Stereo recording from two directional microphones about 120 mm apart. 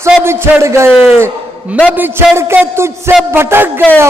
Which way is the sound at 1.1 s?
15° right (ahead or behind).